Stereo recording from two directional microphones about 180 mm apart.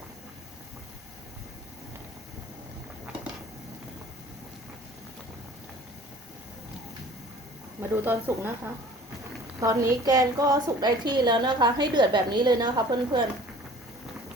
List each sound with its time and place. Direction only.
7.8 s a woman's voice: 10° right (ahead or behind)